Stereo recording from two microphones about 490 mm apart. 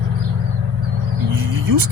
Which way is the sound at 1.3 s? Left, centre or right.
Right.